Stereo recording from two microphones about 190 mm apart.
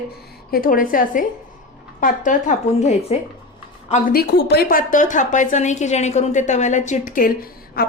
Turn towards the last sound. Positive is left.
turn(degrees=50)  # may be behind; listen again after turning